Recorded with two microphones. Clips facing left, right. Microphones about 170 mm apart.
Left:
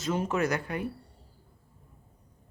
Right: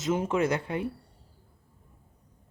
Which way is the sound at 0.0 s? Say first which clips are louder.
Right 2 dB; 20° right (ahead or behind).